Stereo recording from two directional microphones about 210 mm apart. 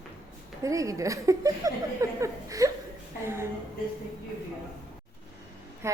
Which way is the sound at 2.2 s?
15° right (ahead or behind).